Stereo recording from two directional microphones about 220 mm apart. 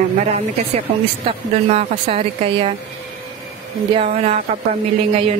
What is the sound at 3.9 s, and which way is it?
A woman's voice, 30° right (ahead or behind).